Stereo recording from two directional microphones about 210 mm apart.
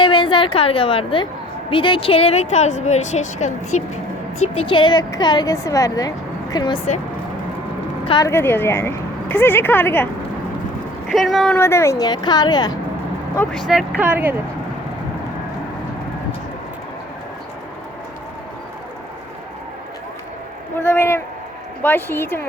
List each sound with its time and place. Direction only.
0.0 s a woman's voice: 25° left (ahead or behind)
8.0 s speech: 20° left (ahead or behind)
11.1 s speech: centre (ahead or behind)
11.5 s a woman's voice: 10° left (ahead or behind)
13.7 s speech: 5° right (ahead or behind)
20.7 s a man's voice: 10° left (ahead or behind)